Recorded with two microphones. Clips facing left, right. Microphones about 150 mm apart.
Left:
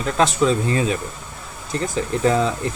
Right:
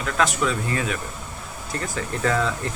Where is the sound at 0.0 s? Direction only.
25° left (ahead or behind).